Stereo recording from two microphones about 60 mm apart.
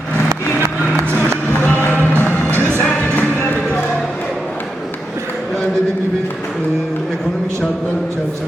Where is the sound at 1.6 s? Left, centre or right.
Left.